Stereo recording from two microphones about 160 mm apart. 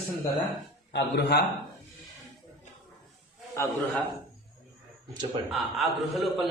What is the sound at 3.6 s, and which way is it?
Speech, 15° left (ahead or behind).